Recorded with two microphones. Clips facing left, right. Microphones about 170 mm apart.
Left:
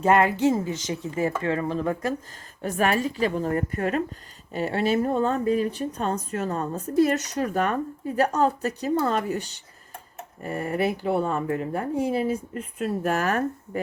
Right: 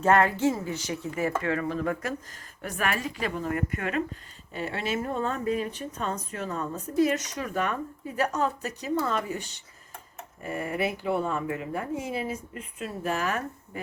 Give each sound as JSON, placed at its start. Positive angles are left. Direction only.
{"t": 0.0, "sound": "speech", "side_deg": 15}
{"t": 10.4, "sound": "speech", "side_deg": 40}